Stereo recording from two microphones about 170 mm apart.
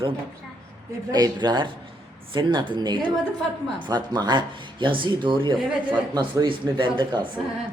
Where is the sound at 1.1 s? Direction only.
25° right (ahead or behind).